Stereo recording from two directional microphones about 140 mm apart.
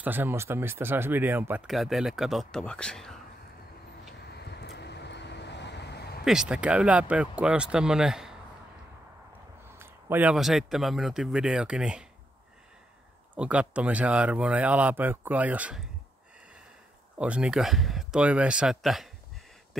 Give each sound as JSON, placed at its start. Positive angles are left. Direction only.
{"t": 0.0, "sound": "speech", "side_deg": -15}
{"t": 1.7, "sound": "speech", "side_deg": 0}
{"t": 6.2, "sound": "speech", "side_deg": -5}
{"t": 9.8, "sound": "a sound", "side_deg": -15}
{"t": 10.3, "sound": "speech", "side_deg": 0}
{"t": 13.3, "sound": "speech", "side_deg": -10}
{"t": 17.2, "sound": "speech", "side_deg": -5}